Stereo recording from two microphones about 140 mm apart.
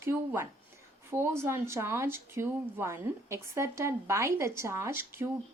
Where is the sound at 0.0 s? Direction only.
15° right (ahead or behind).